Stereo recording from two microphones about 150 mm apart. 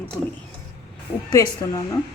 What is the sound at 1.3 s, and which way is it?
Speech, 25° left (ahead or behind).